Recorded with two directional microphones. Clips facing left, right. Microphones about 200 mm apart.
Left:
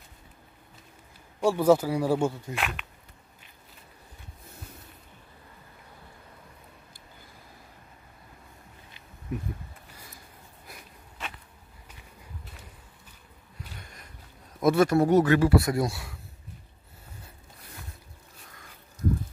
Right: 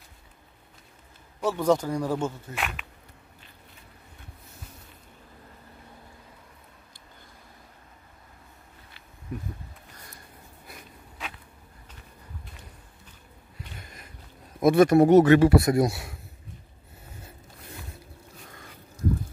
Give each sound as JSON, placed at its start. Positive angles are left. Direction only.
{"t": 1.4, "sound": "speech", "side_deg": 10}
{"t": 2.5, "sound": "speech", "side_deg": 0}
{"t": 9.9, "sound": "a sound", "side_deg": 5}
{"t": 14.6, "sound": "speech", "side_deg": -15}